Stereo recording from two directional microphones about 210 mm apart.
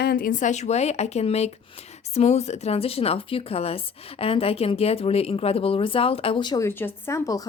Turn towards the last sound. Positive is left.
turn(degrees=15)  # may be behind; listen again after turning